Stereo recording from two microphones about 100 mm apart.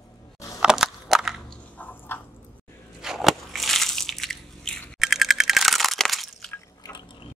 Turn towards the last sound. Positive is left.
turn(degrees=5)  # may be behind; listen again after turning